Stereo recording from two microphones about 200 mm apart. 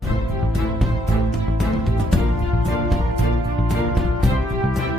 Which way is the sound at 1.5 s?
Centre (ahead or behind).